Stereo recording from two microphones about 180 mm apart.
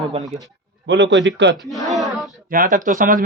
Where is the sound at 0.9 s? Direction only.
80° right.